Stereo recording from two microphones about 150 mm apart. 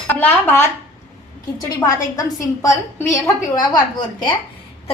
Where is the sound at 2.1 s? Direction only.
25° left (ahead or behind).